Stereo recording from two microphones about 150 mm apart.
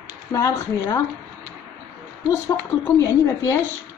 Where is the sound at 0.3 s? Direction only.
20° left (ahead or behind).